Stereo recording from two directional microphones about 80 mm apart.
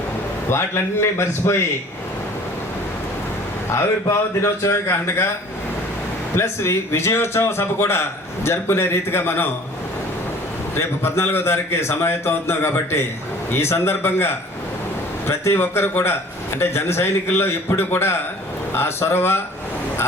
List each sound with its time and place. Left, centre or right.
0.5 s a man's voice: left
4.6 s a man's voice: left
6.3 s a man's voice: left
10.8 s a man's voice: left